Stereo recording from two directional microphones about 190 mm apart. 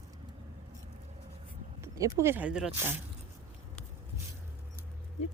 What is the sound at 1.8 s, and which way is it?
Speech, 15° right (ahead or behind).